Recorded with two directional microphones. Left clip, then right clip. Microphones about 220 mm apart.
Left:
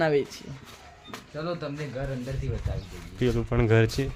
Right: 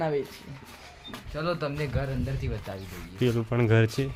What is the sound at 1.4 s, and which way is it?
Speech, 20° right (ahead or behind).